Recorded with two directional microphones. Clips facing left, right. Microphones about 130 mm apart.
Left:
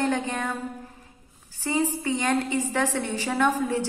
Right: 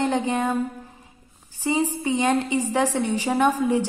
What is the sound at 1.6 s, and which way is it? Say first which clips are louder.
A woman's voice: right 2 dB; 15° right (ahead or behind).